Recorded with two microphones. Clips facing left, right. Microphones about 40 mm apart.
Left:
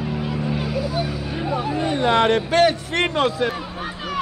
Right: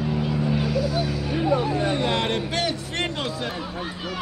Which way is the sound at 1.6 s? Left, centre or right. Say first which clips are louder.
Left 2 dB; left.